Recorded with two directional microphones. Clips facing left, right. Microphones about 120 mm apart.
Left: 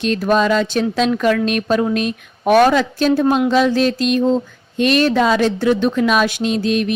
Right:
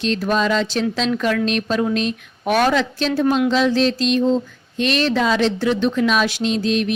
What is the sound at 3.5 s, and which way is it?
Speech, 50° left (ahead or behind).